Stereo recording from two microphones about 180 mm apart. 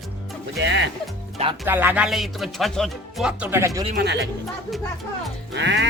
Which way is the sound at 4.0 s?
70° right (ahead or behind).